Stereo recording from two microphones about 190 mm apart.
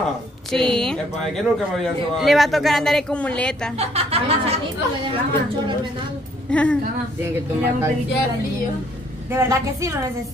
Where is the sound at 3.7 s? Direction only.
35° right (ahead or behind).